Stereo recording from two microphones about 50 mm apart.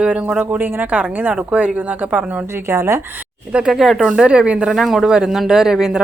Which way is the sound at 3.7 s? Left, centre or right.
Centre.